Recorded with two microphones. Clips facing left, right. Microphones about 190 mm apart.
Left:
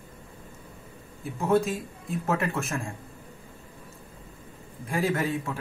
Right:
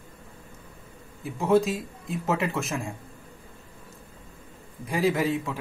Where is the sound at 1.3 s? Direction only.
Centre (ahead or behind).